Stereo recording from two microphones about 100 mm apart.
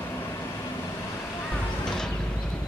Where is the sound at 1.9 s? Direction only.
5° left (ahead or behind).